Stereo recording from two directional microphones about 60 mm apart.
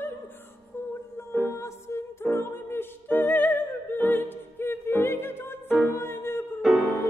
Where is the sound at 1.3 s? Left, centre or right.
Left.